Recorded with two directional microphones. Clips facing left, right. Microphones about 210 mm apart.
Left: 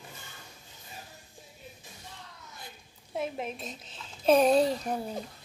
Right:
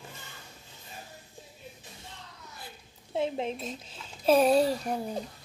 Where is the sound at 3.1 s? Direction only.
30° right (ahead or behind).